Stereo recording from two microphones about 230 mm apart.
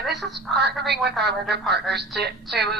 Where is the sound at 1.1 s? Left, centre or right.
Centre.